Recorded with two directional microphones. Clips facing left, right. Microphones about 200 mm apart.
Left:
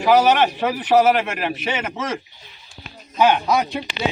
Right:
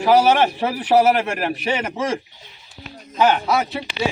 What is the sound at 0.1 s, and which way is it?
Speech, 10° right (ahead or behind).